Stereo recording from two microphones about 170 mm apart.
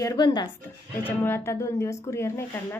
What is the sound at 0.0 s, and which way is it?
Speech, 25° left (ahead or behind).